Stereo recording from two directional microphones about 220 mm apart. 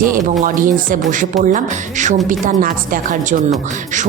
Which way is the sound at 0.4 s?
35° right (ahead or behind).